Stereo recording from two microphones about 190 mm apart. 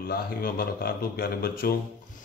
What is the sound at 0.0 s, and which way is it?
Speech, 50° left (ahead or behind).